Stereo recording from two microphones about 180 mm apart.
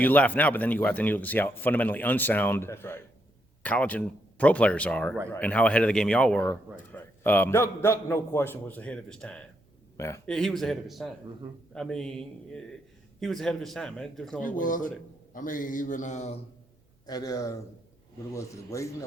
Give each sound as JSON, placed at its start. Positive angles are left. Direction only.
{"t": 0.0, "sound": "a man's voice", "side_deg": 10}
{"t": 14.4, "sound": "a man's voice", "side_deg": 45}
{"t": 17.1, "sound": "a man's voice", "side_deg": 20}